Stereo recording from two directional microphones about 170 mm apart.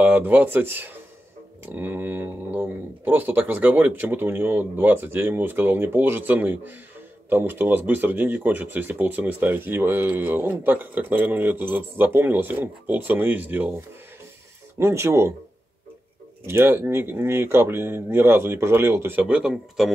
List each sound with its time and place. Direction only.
0.0 s speech: 10° right (ahead or behind)
16.4 s speech: 15° right (ahead or behind)